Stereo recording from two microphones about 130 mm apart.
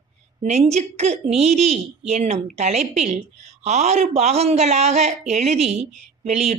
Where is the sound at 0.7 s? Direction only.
60° right (ahead or behind).